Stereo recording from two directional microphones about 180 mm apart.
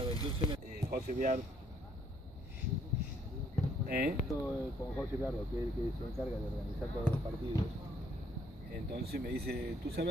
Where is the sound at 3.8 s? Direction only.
55° right (ahead or behind).